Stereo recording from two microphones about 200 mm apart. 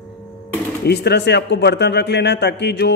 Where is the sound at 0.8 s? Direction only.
55° left (ahead or behind).